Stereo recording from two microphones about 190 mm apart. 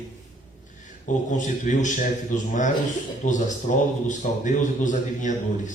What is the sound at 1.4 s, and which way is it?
Speech, 40° left (ahead or behind).